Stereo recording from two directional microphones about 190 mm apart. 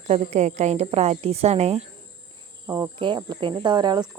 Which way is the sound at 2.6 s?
15° right (ahead or behind).